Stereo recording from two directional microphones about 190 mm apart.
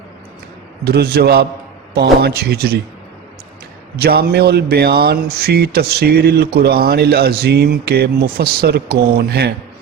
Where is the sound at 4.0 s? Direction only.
55° right (ahead or behind).